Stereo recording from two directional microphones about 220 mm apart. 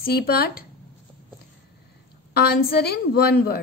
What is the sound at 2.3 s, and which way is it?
A woman's voice, 45° left (ahead or behind).